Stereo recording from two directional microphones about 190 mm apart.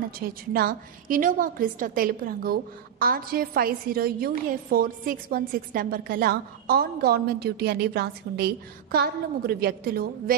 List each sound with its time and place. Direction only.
0.2 s a woman's voice: 50° right (ahead or behind)